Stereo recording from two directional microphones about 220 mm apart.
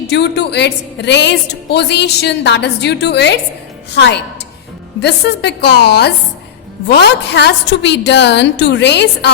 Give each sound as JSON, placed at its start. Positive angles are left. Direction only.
{"t": 0.1, "sound": "a woman's voice", "side_deg": 50}